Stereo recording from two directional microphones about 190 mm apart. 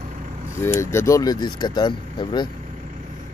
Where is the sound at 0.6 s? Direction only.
15° left (ahead or behind).